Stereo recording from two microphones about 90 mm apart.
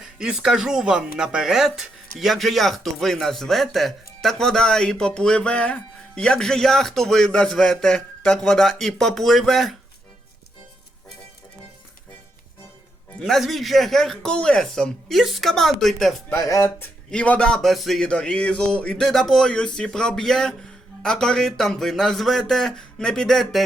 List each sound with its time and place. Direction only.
0.0 s speech: 10° right (ahead or behind)
13.1 s speech: 5° left (ahead or behind)
16.3 s speech: 30° left (ahead or behind)
17.1 s speech: 10° left (ahead or behind)
18.1 s speech: 10° left (ahead or behind)